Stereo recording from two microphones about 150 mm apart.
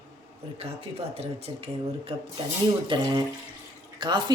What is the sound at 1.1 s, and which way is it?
A woman's voice, 40° right (ahead or behind).